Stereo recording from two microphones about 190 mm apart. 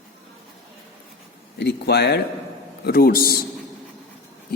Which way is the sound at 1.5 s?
60° left (ahead or behind).